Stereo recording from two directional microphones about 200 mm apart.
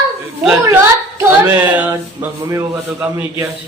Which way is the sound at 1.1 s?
10° right (ahead or behind).